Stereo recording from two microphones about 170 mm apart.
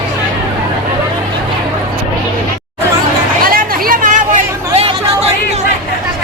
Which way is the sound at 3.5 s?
55° right (ahead or behind).